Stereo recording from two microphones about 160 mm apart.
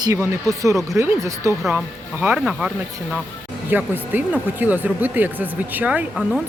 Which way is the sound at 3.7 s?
10° right (ahead or behind).